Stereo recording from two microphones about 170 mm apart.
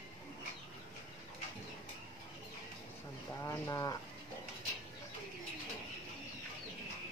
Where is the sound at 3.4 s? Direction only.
20° left (ahead or behind).